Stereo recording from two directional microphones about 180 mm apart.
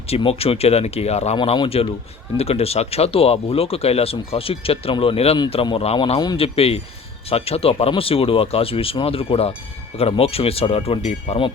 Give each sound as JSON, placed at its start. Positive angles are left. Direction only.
{"t": 0.1, "sound": "speech", "side_deg": 30}